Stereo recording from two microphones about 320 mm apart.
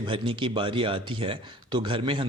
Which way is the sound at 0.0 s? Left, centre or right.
Centre.